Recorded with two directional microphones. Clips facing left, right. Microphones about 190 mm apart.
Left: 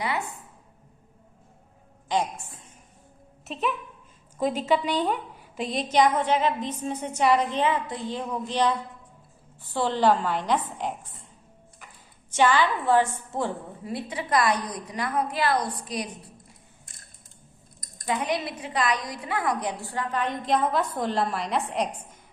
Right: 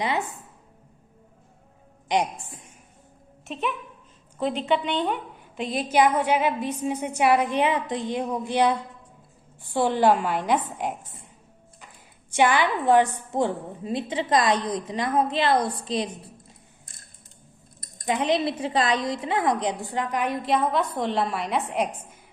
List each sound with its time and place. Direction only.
2.0 s a woman's voice: 15° right (ahead or behind)
3.4 s a woman's voice: centre (ahead or behind)
12.3 s a woman's voice: 15° right (ahead or behind)
18.0 s a woman's voice: 25° right (ahead or behind); by 21.8 s centre (ahead or behind)